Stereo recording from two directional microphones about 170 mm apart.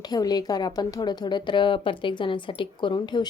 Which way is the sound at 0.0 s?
25° left (ahead or behind).